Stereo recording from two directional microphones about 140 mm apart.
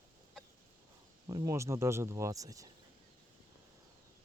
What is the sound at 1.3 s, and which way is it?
Speech, 25° right (ahead or behind).